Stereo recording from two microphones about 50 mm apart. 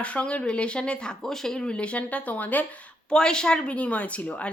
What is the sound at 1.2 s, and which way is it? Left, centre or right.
A woman's voice, centre.